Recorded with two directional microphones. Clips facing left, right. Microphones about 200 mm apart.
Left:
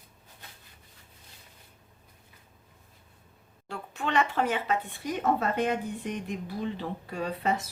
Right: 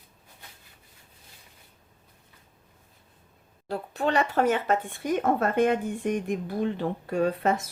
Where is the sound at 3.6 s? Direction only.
35° right (ahead or behind).